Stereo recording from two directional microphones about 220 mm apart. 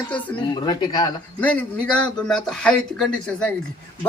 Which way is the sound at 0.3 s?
20° left (ahead or behind).